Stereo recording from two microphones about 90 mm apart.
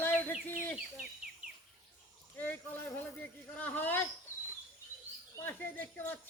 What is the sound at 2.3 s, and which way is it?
Speech, 20° left (ahead or behind).